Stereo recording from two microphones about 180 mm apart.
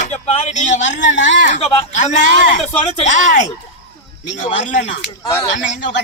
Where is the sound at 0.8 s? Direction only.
85° left.